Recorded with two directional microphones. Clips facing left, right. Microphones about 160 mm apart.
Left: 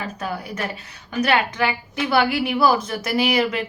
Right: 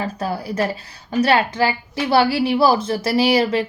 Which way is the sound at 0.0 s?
35° right (ahead or behind).